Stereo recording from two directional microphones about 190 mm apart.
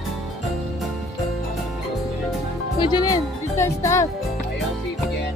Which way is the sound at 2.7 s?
25° left (ahead or behind).